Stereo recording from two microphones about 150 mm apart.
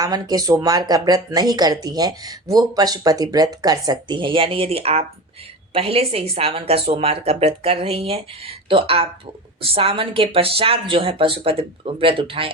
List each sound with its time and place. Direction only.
0.0 s a woman's voice: 25° right (ahead or behind)